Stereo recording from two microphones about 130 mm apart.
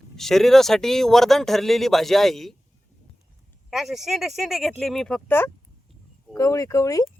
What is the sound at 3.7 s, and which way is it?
Speech, centre (ahead or behind).